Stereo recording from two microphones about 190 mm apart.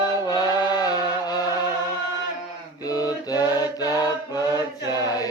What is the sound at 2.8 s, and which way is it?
Mantra, 20° left (ahead or behind).